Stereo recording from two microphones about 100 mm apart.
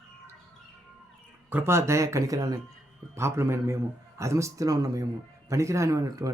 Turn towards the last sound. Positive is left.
turn(degrees=-35)  # may be behind; listen again after turning